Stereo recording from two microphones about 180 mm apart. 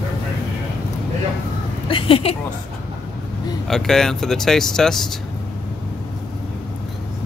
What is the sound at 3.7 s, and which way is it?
Speech, centre (ahead or behind).